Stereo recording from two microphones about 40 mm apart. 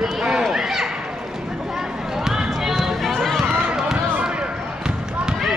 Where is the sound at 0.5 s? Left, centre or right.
Centre.